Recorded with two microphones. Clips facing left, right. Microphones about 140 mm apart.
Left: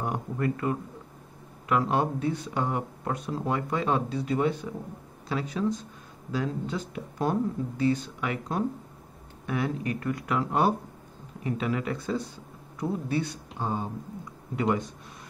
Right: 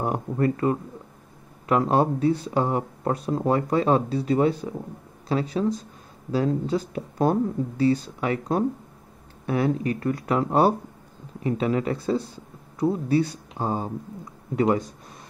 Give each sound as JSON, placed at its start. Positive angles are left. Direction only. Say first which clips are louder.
{"t": 0.0, "sound": "speech", "louder": "right 5 dB", "side_deg": -35}